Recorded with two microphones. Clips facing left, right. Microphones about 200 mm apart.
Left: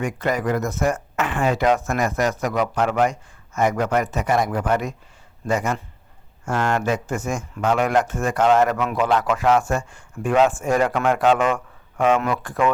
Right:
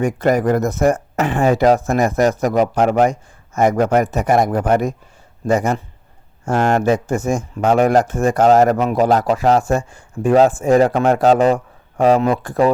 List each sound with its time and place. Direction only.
0.0 s speech: 40° right (ahead or behind)